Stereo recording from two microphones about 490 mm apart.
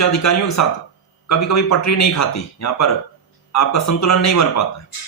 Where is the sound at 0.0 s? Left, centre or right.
Left.